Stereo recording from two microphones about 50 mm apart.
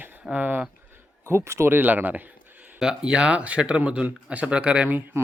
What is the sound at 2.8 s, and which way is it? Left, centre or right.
Speech, centre.